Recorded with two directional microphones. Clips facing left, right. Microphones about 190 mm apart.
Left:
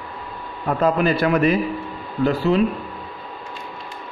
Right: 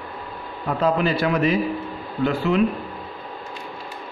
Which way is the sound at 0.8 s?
55° left (ahead or behind).